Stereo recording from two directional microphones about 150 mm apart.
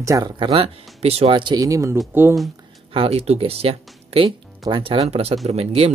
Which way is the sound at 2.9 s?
40° right (ahead or behind).